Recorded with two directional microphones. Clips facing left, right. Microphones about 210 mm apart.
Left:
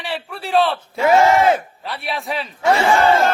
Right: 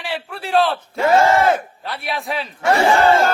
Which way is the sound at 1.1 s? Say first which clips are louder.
Left 1 dB; 15° left (ahead or behind).